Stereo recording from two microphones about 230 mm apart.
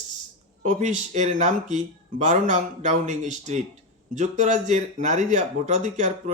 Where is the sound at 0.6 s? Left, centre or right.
Right.